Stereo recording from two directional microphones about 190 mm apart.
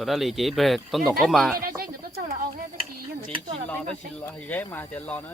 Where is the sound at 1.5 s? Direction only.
50° right (ahead or behind).